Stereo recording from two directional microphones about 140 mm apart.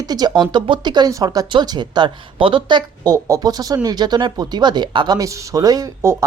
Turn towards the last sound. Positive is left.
turn(degrees=-20)  # may be behind; listen again after turning